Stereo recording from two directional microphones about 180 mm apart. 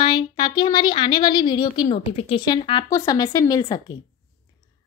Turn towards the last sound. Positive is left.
turn(degrees=20)  # may be behind; listen again after turning